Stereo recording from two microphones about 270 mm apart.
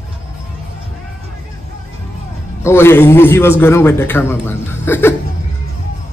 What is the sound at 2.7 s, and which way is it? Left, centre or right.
Speech, centre.